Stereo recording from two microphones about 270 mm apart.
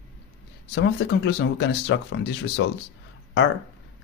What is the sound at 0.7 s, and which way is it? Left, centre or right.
Speech, left.